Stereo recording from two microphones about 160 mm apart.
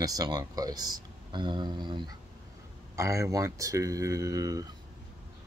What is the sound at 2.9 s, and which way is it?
Speech, 20° right (ahead or behind).